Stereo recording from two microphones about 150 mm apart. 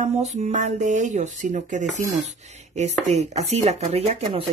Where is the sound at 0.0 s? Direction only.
50° right (ahead or behind).